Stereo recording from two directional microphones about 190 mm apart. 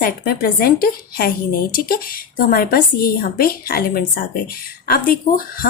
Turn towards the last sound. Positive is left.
turn(degrees=50)  # may be behind; listen again after turning